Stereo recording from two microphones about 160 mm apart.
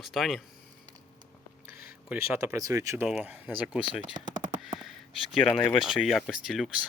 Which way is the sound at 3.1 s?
5° right (ahead or behind).